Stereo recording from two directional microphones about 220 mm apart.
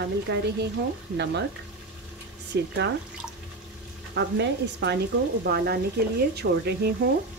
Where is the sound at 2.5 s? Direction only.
50° right (ahead or behind).